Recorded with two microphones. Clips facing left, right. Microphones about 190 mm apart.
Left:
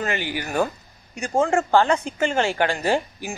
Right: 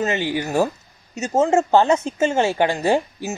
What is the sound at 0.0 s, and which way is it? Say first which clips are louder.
Speech: right 5 dB; 25° right (ahead or behind).